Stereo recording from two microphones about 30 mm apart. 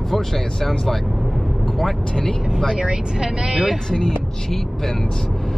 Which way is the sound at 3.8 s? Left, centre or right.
Left.